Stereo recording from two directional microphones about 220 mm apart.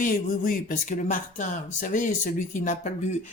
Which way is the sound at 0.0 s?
40° left (ahead or behind).